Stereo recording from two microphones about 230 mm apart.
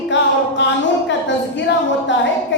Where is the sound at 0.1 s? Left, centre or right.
Left.